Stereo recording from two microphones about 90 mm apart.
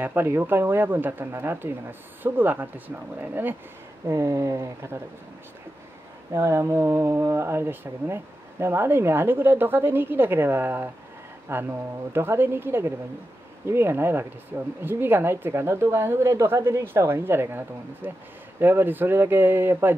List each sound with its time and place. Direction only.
0.0 s speech: 25° right (ahead or behind)
4.1 s speech: 30° right (ahead or behind)
6.3 s speech: 30° right (ahead or behind)